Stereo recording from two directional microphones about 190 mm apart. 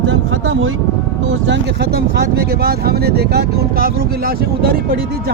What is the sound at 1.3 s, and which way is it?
Speech, 65° right (ahead or behind).